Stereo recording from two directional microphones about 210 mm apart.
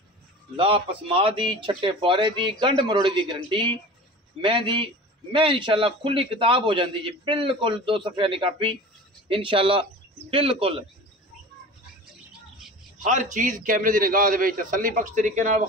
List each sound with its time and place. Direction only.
0.6 s a man's voice: 25° right (ahead or behind)
13.0 s a man's voice: 35° right (ahead or behind)